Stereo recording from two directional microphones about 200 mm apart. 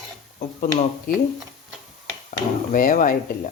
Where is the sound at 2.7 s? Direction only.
45° left (ahead or behind).